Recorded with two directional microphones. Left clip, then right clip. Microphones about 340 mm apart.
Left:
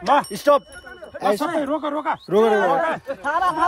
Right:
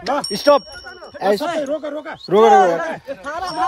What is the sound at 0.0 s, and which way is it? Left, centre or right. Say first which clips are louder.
Speech: even; centre.